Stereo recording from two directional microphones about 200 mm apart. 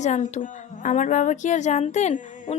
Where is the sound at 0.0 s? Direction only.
35° left (ahead or behind).